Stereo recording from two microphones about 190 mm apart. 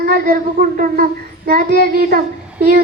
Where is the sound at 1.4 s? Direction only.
50° right (ahead or behind).